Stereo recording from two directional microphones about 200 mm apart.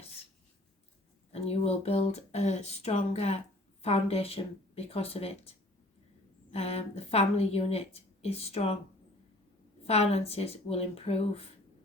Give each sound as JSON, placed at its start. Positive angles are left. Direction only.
{"t": 1.3, "sound": "a woman's voice", "side_deg": 30}
{"t": 6.5, "sound": "a woman's voice", "side_deg": 30}
{"t": 9.8, "sound": "a woman's voice", "side_deg": 30}